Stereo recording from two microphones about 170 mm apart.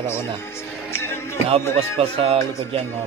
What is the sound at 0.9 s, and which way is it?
Music, 15° left (ahead or behind).